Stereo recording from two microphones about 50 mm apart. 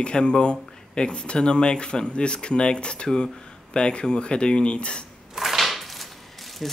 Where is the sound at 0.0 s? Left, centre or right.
Centre.